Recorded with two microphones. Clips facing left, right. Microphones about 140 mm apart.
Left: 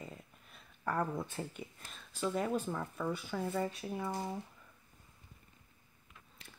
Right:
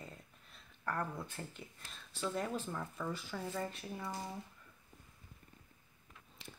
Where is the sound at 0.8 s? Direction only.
15° left (ahead or behind).